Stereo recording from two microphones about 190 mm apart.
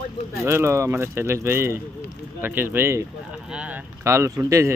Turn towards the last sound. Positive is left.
turn(degrees=-15)  # may be behind; listen again after turning